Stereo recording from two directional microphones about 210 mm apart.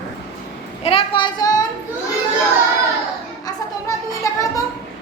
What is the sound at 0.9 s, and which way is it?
Speech, 25° left (ahead or behind).